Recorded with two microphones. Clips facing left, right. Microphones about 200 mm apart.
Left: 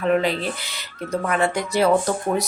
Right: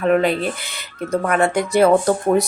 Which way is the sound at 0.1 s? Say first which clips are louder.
Right 3 dB; 55° right (ahead or behind).